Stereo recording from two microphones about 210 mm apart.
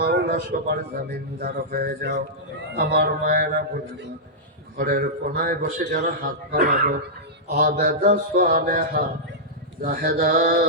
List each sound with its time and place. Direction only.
0.0 s a man's voice: 50° right (ahead or behind)
4.8 s a man's voice: 45° right (ahead or behind)